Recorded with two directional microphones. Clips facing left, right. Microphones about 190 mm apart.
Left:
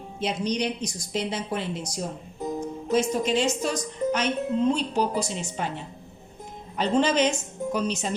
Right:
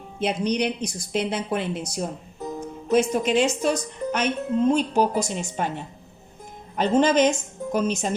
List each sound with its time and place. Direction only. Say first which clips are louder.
0.2 s a woman's voice: right 3 dB; 60° right (ahead or behind)
6.7 s a woman's voice: right 3 dB; 50° right (ahead or behind)